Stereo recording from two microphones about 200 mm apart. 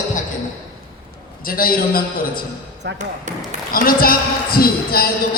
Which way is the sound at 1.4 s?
45° left (ahead or behind).